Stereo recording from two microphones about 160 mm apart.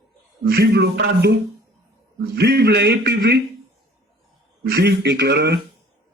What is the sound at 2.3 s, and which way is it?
A man's voice, 85° right.